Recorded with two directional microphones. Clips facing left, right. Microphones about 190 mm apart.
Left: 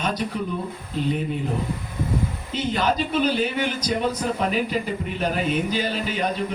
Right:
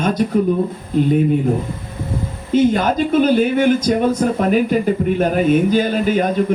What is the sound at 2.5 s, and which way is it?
Speech, 50° right (ahead or behind).